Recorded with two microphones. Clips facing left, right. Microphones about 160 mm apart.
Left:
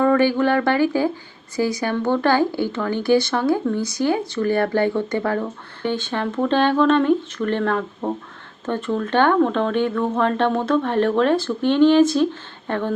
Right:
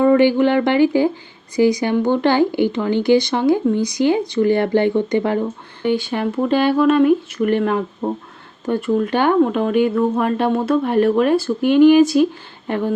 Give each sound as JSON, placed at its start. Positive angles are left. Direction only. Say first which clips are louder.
{"t": 0.0, "sound": "speech", "louder": "right 4 dB", "side_deg": -20}